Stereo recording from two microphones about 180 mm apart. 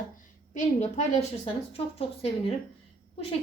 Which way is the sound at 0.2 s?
40° left (ahead or behind).